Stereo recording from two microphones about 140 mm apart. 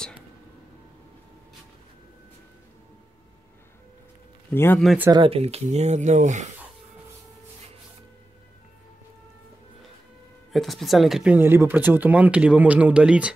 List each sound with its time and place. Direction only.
4.5 s speech: 15° left (ahead or behind)
5.1 s speech: 40° right (ahead or behind); by 6.4 s 60° right (ahead or behind)
10.5 s speech: centre (ahead or behind)
11.3 s speech: 15° right (ahead or behind)